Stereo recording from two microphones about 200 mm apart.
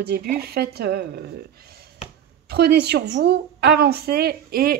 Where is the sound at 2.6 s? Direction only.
55° right (ahead or behind).